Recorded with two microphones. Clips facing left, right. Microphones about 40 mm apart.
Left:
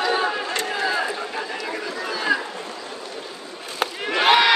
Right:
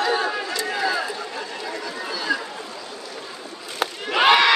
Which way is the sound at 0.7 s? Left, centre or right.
Centre.